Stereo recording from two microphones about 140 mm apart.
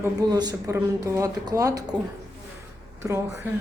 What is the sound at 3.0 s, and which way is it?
Speech, 20° right (ahead or behind).